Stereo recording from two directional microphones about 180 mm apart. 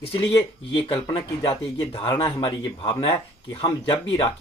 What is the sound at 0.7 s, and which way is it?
A man's voice, 25° left (ahead or behind).